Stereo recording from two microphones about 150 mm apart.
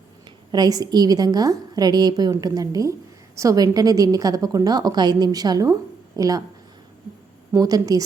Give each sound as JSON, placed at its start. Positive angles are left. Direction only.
{"t": 0.5, "sound": "a woman's voice", "side_deg": -25}
{"t": 7.5, "sound": "a woman's voice", "side_deg": -25}